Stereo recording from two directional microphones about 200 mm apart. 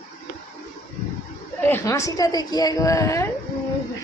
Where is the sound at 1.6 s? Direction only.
15° left (ahead or behind).